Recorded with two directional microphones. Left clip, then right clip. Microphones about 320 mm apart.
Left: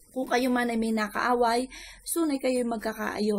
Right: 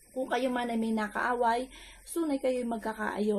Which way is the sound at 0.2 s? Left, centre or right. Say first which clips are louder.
Left 4 dB; left.